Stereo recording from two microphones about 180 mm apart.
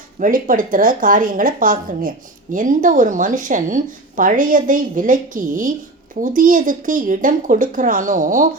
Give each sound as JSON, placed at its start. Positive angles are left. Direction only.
{"t": 0.2, "sound": "a woman's voice", "side_deg": -50}